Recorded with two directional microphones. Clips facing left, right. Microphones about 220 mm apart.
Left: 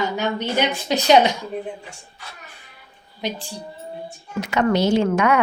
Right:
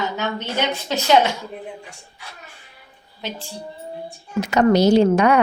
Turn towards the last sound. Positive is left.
turn(degrees=-35)  # may be behind; listen again after turning